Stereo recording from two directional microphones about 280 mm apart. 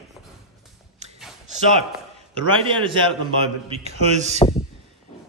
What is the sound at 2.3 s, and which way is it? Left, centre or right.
Speech, centre.